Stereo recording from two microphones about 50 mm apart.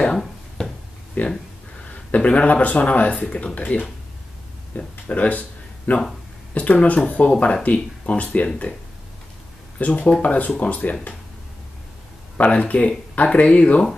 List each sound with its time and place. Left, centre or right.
0.6 s a sound: centre
1.2 s speech: left
9.8 s speech: left
12.4 s speech: left